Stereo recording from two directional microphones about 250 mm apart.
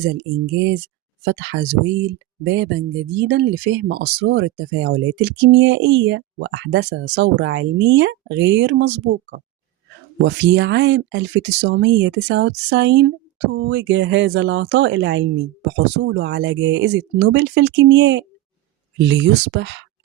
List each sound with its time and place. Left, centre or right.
1.2 s speech: right